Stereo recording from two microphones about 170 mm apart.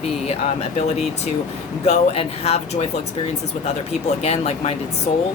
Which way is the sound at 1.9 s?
35° left (ahead or behind).